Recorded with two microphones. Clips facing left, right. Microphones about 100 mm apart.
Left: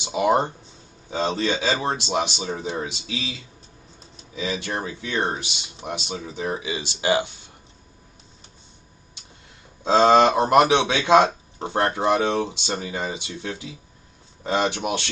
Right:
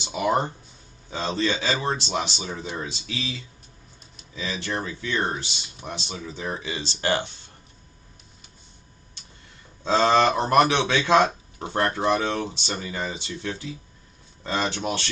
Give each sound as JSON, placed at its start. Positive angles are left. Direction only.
{"t": 0.0, "sound": "speech", "side_deg": 20}
{"t": 4.4, "sound": "speech", "side_deg": 20}
{"t": 9.8, "sound": "speech", "side_deg": 20}
{"t": 14.7, "sound": "speech", "side_deg": 15}